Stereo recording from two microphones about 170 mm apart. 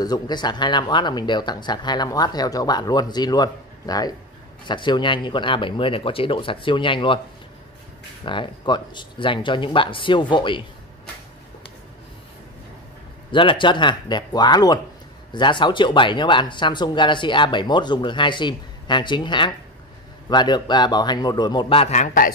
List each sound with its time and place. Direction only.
0.0 s speech: 25° left (ahead or behind)
8.3 s speech: 25° left (ahead or behind)
13.3 s speech: 30° left (ahead or behind); by 22.3 s 50° left (ahead or behind)